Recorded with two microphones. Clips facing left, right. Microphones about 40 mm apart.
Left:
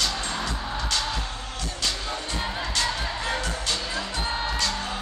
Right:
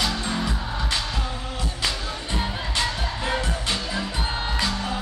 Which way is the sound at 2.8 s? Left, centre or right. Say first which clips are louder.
Right 2 dB; right.